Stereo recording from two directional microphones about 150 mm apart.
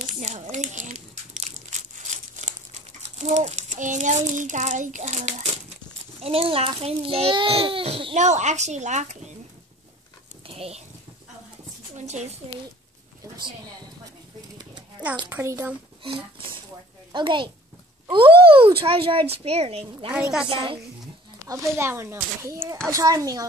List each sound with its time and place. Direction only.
0.0 s crumpling: 50° right (ahead or behind)
3.0 s a child's voice: 50° right (ahead or behind)
10.4 s pig: 40° right (ahead or behind)
12.0 s a woman's voice: 50° right (ahead or behind)
13.2 s a woman's voice: 25° right (ahead or behind)
15.2 s a child's voice: 15° right (ahead or behind)
16.0 s a sound: 40° right (ahead or behind)
17.1 s a child's voice: 30° right (ahead or behind)
20.1 s a woman's voice: 5° right (ahead or behind)
20.4 s a child's voice: 35° right (ahead or behind)
21.5 s speech: 20° right (ahead or behind)